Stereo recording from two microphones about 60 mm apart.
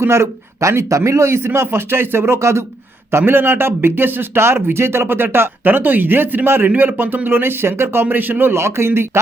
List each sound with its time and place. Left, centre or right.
0.0 s a man's voice: right
8.0 s a man's voice: right